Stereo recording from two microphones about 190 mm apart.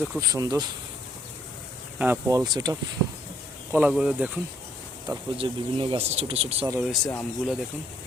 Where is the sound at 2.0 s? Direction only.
15° right (ahead or behind).